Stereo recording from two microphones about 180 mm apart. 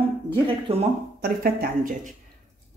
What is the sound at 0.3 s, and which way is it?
Speech, 30° right (ahead or behind).